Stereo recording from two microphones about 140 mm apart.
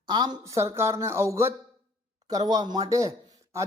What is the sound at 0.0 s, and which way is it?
Speech, 30° right (ahead or behind).